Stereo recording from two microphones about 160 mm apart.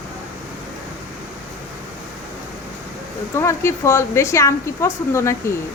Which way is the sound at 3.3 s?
15° left (ahead or behind).